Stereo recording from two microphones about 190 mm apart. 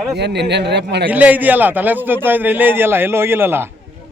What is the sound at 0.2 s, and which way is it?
Speech, 65° right (ahead or behind).